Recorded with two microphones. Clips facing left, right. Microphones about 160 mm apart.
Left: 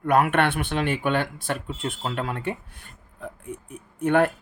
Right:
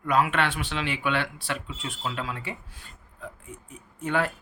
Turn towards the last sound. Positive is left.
turn(degrees=55)  # may be behind; listen again after turning